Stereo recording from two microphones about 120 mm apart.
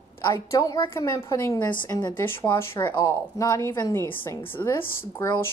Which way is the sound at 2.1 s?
20° left (ahead or behind).